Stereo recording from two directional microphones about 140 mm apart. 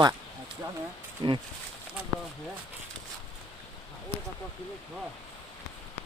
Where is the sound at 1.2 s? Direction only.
35° right (ahead or behind).